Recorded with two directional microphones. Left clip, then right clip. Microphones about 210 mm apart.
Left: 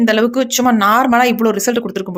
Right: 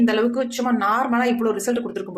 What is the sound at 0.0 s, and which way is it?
Speech, 40° left (ahead or behind).